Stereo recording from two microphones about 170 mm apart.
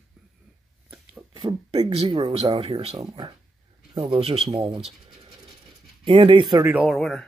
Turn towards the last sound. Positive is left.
turn(degrees=0)  # may be behind; listen again after turning